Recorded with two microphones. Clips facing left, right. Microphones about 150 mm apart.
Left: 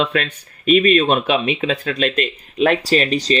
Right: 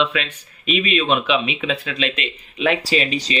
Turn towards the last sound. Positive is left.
turn(degrees=40)  # may be behind; listen again after turning